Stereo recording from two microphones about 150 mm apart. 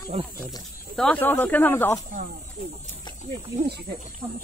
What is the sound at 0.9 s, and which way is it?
Speech, 5° left (ahead or behind).